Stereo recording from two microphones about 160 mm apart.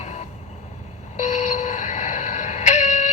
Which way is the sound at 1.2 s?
50° left (ahead or behind).